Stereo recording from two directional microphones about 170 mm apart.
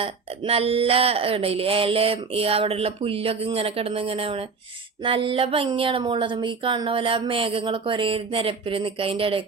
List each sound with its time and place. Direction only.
0.0 s speech: 35° right (ahead or behind)